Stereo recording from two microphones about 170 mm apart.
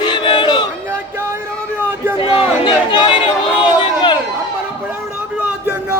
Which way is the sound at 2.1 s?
30° left (ahead or behind).